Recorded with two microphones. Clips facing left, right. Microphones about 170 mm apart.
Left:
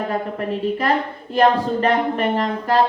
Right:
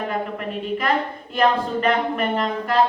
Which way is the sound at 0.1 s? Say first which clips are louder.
Left 3 dB; 35° left (ahead or behind).